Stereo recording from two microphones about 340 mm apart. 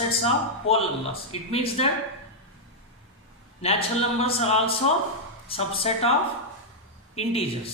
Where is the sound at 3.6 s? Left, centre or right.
Centre.